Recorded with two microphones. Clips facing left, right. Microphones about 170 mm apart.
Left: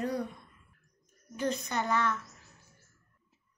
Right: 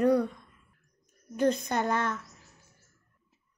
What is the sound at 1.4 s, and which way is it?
Speech, 55° right (ahead or behind).